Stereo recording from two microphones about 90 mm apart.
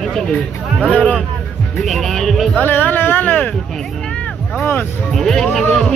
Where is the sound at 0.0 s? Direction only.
5° left (ahead or behind).